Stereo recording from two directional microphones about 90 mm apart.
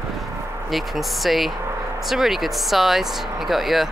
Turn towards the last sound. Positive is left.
turn(degrees=0)  # may be behind; listen again after turning